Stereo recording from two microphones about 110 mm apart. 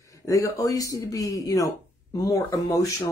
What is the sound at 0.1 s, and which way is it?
Speech, 30° left (ahead or behind).